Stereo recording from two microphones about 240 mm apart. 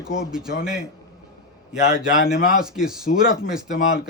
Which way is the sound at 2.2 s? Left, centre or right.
Left.